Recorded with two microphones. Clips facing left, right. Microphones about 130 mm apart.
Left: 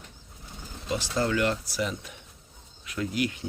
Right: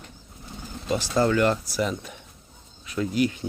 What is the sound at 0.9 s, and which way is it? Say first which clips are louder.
Speech: right 5 dB; 45° right (ahead or behind).